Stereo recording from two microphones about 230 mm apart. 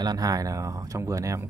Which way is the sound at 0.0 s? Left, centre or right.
Centre.